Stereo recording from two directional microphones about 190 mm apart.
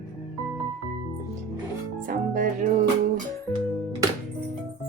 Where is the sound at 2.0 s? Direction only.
45° right (ahead or behind).